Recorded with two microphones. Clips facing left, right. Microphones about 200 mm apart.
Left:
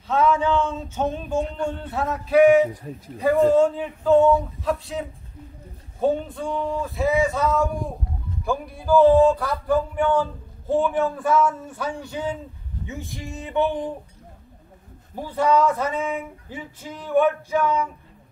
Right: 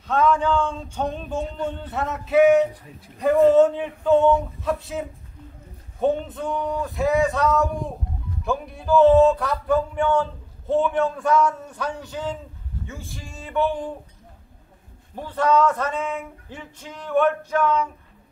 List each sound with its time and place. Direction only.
0.1 s speech: centre (ahead or behind); by 13.9 s 20° left (ahead or behind)
15.1 s speech: 10° left (ahead or behind)